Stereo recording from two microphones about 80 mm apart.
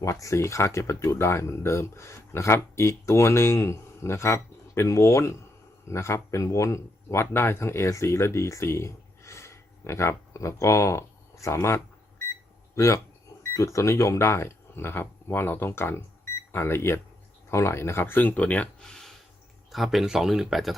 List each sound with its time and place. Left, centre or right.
0.0 s speech: left; by 20.7 s centre